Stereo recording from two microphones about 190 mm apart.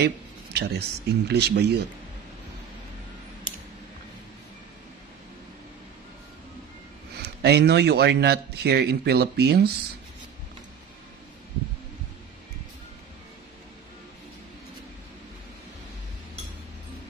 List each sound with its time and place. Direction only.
0.0 s a man's voice: 60° right (ahead or behind)
7.2 s a man's voice: 60° right (ahead or behind)